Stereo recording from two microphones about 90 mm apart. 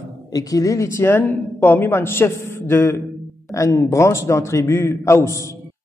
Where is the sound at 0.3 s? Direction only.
40° left (ahead or behind).